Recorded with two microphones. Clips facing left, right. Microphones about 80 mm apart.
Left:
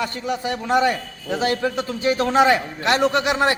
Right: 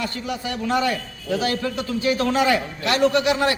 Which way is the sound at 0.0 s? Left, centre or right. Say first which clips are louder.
Left 3 dB; left.